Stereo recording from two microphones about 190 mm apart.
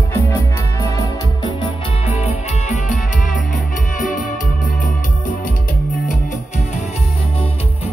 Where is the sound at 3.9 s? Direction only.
40° left (ahead or behind).